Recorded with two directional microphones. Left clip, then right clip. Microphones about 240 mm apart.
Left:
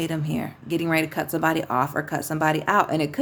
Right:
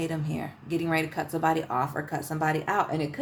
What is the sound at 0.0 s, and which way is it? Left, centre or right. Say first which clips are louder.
Speech: left 4 dB; left.